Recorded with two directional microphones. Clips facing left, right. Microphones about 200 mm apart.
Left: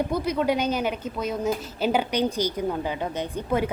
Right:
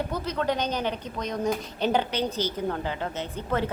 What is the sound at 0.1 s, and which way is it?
A woman's voice, 10° left (ahead or behind).